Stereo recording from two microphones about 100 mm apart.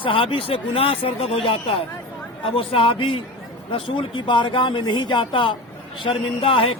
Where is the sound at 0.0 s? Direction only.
65° left (ahead or behind).